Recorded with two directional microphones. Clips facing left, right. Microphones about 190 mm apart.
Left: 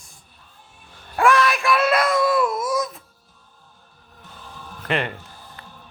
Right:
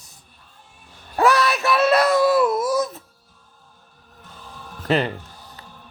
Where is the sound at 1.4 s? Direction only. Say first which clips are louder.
Right 1 dB; 5° right (ahead or behind).